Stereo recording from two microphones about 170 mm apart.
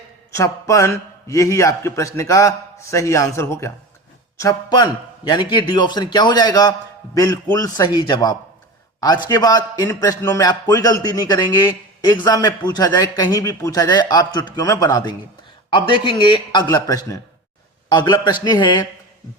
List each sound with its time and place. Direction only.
0.3 s a man's voice: 15° left (ahead or behind)